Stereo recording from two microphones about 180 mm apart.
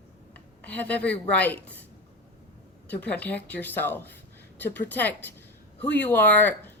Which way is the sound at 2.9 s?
10° left (ahead or behind).